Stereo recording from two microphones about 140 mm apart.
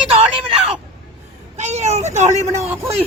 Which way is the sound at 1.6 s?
55° right (ahead or behind).